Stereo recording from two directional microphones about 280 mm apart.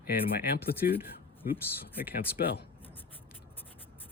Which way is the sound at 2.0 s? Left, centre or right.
Left.